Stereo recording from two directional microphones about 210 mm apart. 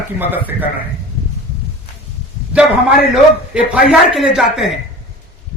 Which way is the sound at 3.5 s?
5° right (ahead or behind).